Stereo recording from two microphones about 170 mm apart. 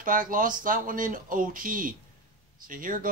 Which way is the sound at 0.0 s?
55° right (ahead or behind).